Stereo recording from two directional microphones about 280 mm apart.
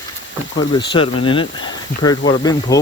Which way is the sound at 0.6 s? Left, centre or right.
Centre.